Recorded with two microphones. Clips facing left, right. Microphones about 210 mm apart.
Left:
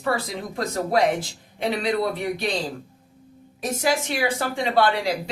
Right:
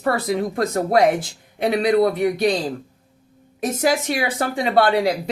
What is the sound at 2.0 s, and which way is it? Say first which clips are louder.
Speech: right 7 dB; 50° right (ahead or behind).